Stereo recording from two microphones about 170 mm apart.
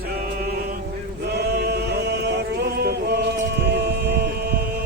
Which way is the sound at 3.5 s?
75° right (ahead or behind).